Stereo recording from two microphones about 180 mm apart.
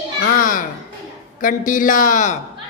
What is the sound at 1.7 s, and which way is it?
Speech, 50° left (ahead or behind).